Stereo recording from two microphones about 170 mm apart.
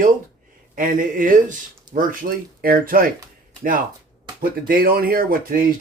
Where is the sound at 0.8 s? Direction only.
55° right (ahead or behind).